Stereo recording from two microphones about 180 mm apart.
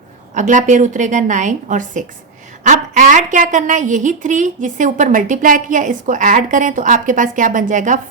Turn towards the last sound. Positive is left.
turn(degrees=-45)  # may be behind; listen again after turning